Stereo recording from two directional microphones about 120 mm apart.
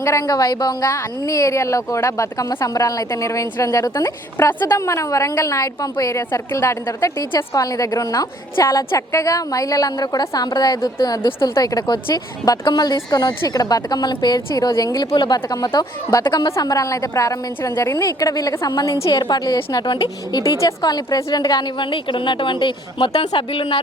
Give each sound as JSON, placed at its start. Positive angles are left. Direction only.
{"t": 0.0, "sound": "a woman's voice", "side_deg": 25}